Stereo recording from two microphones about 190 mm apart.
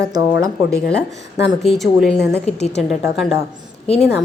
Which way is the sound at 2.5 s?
35° left (ahead or behind).